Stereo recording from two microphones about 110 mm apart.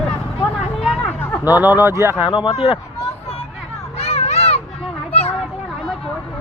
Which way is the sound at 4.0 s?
70° left (ahead or behind).